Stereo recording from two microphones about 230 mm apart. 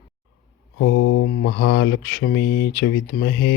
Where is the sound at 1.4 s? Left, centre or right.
Left.